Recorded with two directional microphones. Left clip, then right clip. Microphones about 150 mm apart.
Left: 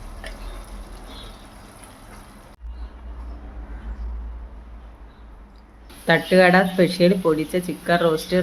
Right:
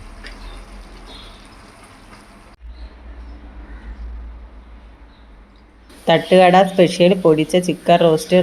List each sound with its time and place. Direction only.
6.1 s speech: 20° right (ahead or behind)